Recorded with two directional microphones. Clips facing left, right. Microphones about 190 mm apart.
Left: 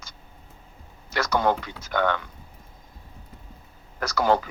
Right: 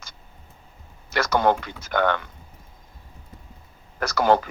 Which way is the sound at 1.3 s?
60° right (ahead or behind).